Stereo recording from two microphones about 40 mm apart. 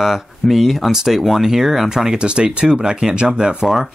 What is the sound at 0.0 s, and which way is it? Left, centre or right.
Speech, centre.